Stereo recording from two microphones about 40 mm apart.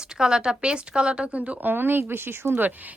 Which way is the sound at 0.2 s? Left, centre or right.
Centre.